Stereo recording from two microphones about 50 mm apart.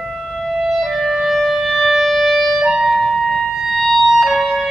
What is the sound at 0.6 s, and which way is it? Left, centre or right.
Music, centre.